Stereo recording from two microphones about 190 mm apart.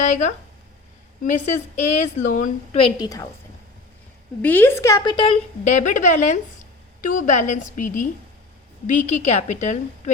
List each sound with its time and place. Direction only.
0.0 s a woman's voice: 40° left (ahead or behind)
2.7 s a woman's voice: 25° left (ahead or behind)
4.4 s a woman's voice: 10° left (ahead or behind); by 9.7 s 40° left (ahead or behind)